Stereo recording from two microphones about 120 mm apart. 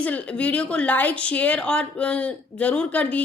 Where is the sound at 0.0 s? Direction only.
10° left (ahead or behind).